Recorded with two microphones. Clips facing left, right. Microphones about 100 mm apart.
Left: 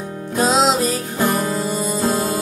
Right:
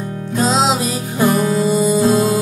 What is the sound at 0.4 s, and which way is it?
Music, centre (ahead or behind).